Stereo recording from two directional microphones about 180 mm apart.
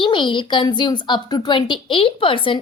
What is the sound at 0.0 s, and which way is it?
A woman's voice, 25° left (ahead or behind).